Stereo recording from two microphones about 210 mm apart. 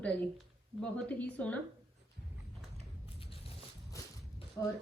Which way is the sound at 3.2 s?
25° left (ahead or behind).